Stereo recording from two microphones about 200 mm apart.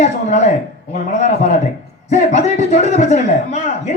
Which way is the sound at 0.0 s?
35° left (ahead or behind).